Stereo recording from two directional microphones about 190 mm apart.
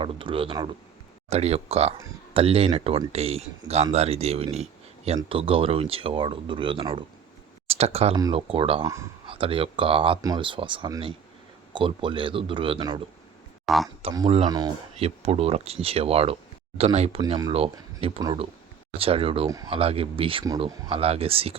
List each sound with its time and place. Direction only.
0.0 s speech: 25° right (ahead or behind)
13.7 s speech: centre (ahead or behind)
14.0 s speech: 25° right (ahead or behind)
17.2 s speech: 25° right (ahead or behind)